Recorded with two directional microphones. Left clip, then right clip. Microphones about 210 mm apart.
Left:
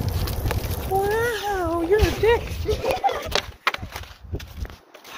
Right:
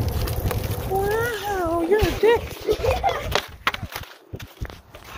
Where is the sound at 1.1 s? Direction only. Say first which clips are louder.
Left 1 dB; centre (ahead or behind).